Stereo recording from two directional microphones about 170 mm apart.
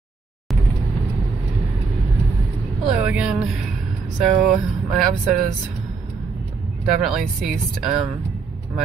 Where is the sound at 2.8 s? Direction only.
5° right (ahead or behind).